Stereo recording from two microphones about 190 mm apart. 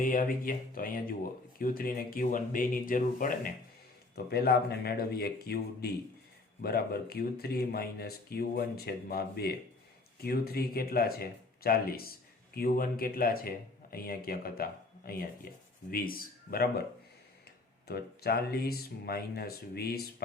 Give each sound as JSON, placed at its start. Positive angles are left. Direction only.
{"t": 0.0, "sound": "speech", "side_deg": 45}
{"t": 4.1, "sound": "speech", "side_deg": 55}
{"t": 17.8, "sound": "speech", "side_deg": 55}